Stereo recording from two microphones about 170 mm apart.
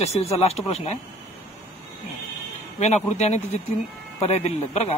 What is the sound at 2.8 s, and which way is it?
Speech, 40° left (ahead or behind).